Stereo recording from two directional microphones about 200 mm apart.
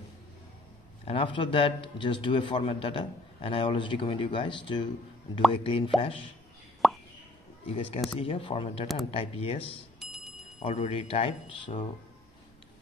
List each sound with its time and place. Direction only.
1.0 s a man's voice: 25° left (ahead or behind)
6.8 s plop: centre (ahead or behind)
7.6 s a man's voice: 30° left (ahead or behind)
9.9 s bicycle bell: centre (ahead or behind)
10.6 s a man's voice: 35° left (ahead or behind)